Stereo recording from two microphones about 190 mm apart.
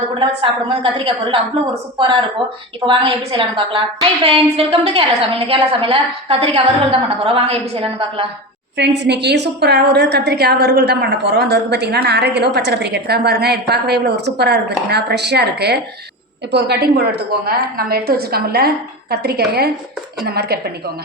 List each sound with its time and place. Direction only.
0.7 s a woman's voice: 30° right (ahead or behind)
2.8 s a woman's voice: 25° right (ahead or behind)
8.8 s a woman's voice: 65° right (ahead or behind)